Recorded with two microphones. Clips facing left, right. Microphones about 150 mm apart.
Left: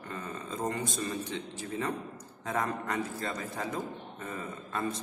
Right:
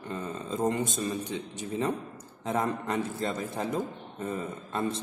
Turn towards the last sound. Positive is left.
turn(degrees=-25)  # may be behind; listen again after turning